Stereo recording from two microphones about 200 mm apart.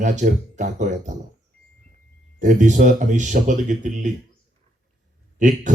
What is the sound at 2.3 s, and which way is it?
Speech, 40° right (ahead or behind).